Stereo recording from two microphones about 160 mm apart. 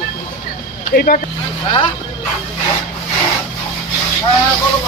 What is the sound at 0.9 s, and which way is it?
Speech, 65° left (ahead or behind).